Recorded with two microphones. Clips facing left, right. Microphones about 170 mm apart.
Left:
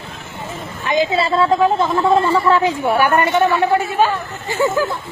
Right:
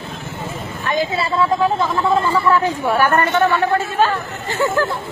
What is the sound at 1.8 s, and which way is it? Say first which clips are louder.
Speech: left 3 dB; 20° left (ahead or behind).